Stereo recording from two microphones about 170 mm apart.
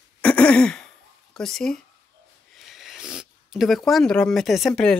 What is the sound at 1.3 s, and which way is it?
Speech, 5° left (ahead or behind).